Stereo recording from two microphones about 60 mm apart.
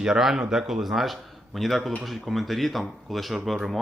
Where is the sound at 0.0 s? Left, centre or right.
Centre.